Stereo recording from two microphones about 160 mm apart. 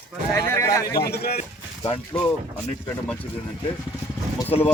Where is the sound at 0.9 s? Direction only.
75° left (ahead or behind).